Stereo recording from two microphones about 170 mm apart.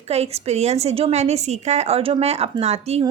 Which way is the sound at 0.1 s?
40° right (ahead or behind).